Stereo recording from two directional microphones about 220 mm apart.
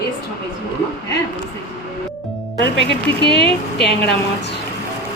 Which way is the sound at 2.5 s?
50° left (ahead or behind).